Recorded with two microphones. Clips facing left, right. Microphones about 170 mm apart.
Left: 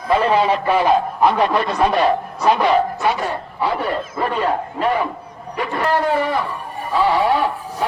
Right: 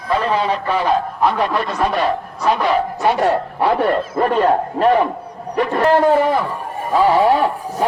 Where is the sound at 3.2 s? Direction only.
70° right (ahead or behind).